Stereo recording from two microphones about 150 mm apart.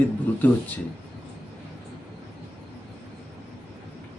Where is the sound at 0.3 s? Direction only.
10° left (ahead or behind).